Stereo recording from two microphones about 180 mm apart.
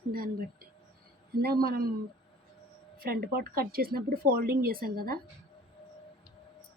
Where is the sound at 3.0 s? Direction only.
55° right (ahead or behind).